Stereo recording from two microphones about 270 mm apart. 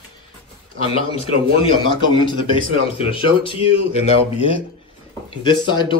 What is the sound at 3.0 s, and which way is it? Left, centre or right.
Speech, centre.